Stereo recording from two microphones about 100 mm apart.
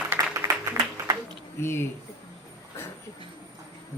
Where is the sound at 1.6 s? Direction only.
25° left (ahead or behind).